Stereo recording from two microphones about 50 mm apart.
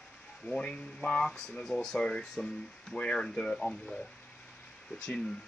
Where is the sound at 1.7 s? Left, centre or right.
Centre.